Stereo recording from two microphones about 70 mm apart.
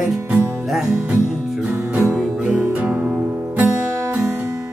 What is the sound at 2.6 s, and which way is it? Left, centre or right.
Music, centre.